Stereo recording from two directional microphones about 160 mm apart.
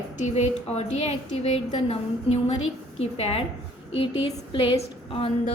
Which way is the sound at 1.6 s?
35° left (ahead or behind).